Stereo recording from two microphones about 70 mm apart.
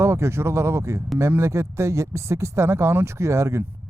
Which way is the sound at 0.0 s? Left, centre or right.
Right.